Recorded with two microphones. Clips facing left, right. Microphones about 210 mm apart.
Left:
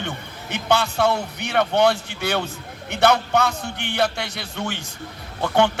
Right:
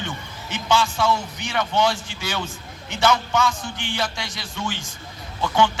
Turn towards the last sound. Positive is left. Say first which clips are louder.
# left 2 dB
turn(degrees=60)  # may be behind; listen again after turning